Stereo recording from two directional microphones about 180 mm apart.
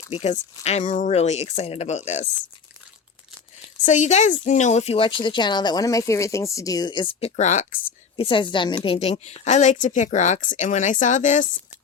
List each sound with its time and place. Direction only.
0.1 s a woman's voice: 35° left (ahead or behind)
3.8 s speech: 40° left (ahead or behind)
8.1 s a woman's voice: 30° left (ahead or behind); by 11.4 s 45° left (ahead or behind)